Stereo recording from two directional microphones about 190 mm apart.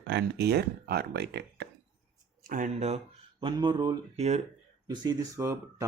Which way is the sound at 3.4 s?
25° right (ahead or behind).